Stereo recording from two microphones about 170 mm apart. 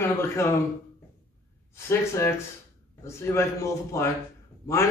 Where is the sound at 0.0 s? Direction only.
15° left (ahead or behind).